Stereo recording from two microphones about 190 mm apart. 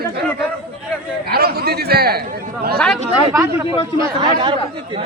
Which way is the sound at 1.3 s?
55° right (ahead or behind).